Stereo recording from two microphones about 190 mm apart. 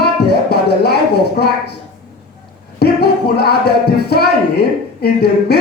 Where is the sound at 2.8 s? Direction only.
55° left (ahead or behind).